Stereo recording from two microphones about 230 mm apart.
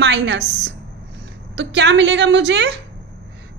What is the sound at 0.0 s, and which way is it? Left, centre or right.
Speech, right.